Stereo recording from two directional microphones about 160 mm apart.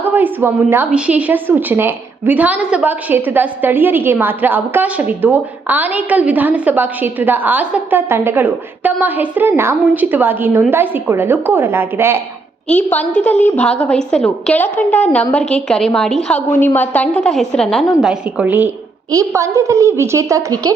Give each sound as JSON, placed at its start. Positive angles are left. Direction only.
{"t": 0.0, "sound": "a woman's voice", "side_deg": -10}
{"t": 12.6, "sound": "a woman's voice", "side_deg": 10}